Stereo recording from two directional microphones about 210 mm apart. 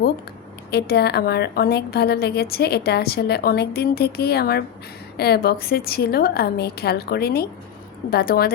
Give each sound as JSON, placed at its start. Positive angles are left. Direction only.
{"t": 0.7, "sound": "a woman's voice", "side_deg": 50}